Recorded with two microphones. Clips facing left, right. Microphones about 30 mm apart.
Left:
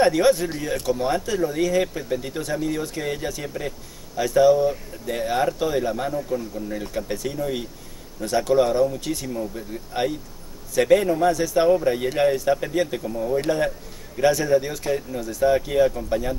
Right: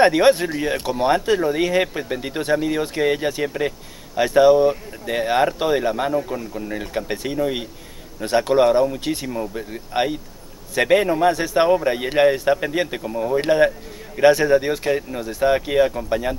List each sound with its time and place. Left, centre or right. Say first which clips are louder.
0.0 s a man's voice: right 3 dB; right